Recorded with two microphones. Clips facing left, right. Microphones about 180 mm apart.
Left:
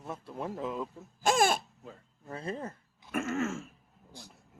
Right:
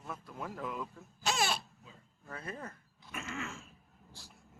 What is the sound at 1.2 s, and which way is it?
Speech, 50° left (ahead or behind).